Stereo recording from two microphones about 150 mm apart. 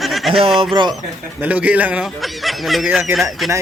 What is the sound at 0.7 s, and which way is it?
Speech, 30° right (ahead or behind).